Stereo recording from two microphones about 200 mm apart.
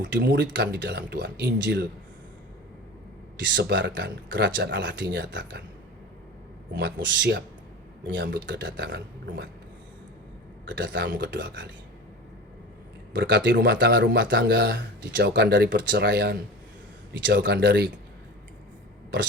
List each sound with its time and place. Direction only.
0.0 s speech: 65° right (ahead or behind)
3.5 s speech: 60° right (ahead or behind)
6.7 s speech: 60° right (ahead or behind)
10.7 s speech: 65° right (ahead or behind)
13.1 s speech: 65° right (ahead or behind)
15.1 s speech: 50° right (ahead or behind)